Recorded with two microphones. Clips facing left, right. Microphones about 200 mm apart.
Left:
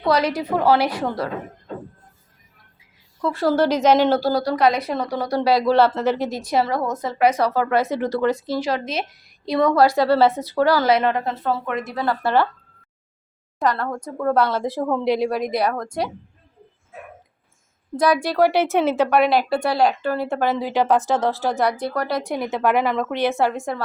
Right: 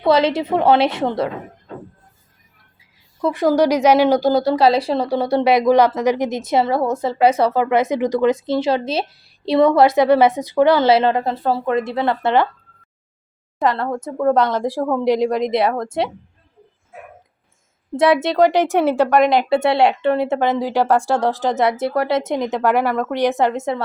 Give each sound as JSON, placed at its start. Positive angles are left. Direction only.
{"t": 0.0, "sound": "a woman's voice", "side_deg": -25}
{"t": 3.2, "sound": "a woman's voice", "side_deg": -20}
{"t": 13.6, "sound": "a woman's voice", "side_deg": -25}
{"t": 17.9, "sound": "a woman's voice", "side_deg": -25}